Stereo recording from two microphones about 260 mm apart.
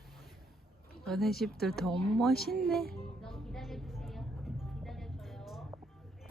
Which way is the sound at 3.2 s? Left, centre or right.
Centre.